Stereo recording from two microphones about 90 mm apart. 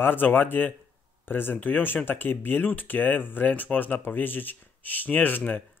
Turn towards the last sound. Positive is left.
turn(degrees=20)  # may be behind; listen again after turning